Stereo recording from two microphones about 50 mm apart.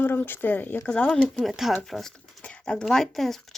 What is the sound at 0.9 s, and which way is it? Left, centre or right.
Speech, left.